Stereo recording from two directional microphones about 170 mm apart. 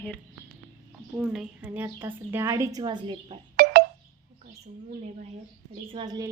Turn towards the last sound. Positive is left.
turn(degrees=-25)  # may be behind; listen again after turning